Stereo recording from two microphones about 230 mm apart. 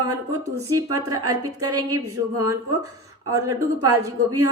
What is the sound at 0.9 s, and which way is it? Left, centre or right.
A woman's voice, centre.